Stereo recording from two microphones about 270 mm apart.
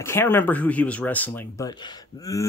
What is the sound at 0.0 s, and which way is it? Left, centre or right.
Speech, centre.